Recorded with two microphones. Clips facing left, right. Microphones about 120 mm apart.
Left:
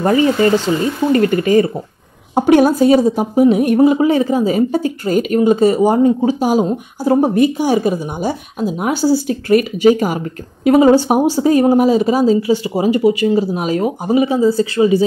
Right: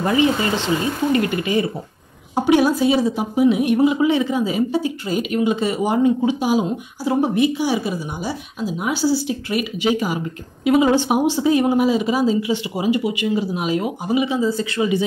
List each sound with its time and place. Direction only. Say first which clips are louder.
0.0 s a woman's voice: left 5 dB; 45° left (ahead or behind)